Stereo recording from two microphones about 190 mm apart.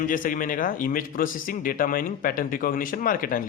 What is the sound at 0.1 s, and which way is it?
A man's voice, 45° left (ahead or behind).